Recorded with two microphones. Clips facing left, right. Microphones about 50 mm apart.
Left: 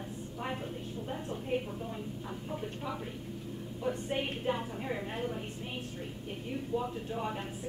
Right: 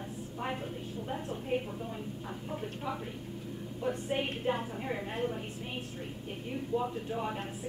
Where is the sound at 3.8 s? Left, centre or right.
Centre.